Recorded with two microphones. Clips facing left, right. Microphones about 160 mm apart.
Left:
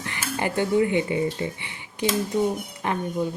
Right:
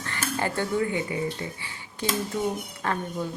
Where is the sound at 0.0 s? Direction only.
15° left (ahead or behind).